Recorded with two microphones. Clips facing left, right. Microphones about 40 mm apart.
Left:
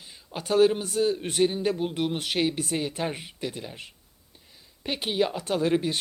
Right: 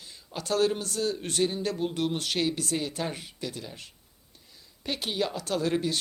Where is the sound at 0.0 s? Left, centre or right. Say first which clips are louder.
Left 1 dB; centre.